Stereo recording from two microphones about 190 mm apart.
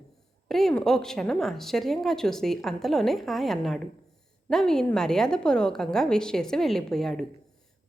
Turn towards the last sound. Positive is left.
turn(degrees=0)  # may be behind; listen again after turning